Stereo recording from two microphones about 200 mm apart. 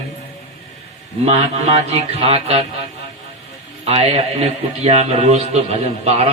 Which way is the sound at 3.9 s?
30° right (ahead or behind).